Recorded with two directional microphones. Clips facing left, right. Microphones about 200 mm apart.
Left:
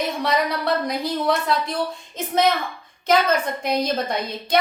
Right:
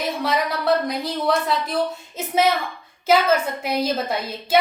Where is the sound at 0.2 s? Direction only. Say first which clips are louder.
Left 1 dB; centre (ahead or behind).